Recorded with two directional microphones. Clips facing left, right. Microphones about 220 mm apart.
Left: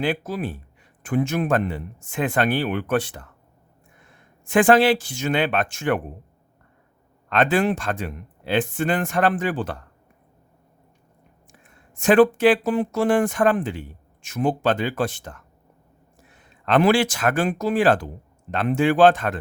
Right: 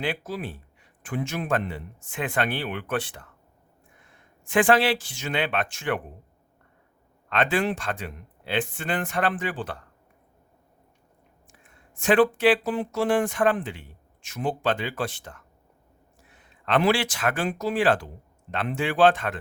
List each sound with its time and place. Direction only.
0.0 s speech: 45° left (ahead or behind)
4.4 s speech: 45° left (ahead or behind)
7.3 s speech: 45° left (ahead or behind)
11.9 s speech: 45° left (ahead or behind)
16.6 s speech: 45° left (ahead or behind)